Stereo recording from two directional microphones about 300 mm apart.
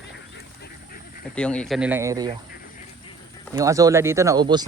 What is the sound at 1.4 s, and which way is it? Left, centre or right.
Speech, centre.